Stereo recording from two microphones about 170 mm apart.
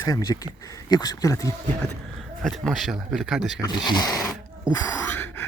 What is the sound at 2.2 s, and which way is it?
Speech, centre (ahead or behind).